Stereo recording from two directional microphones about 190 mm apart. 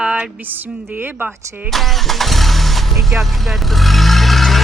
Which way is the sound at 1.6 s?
Centre (ahead or behind).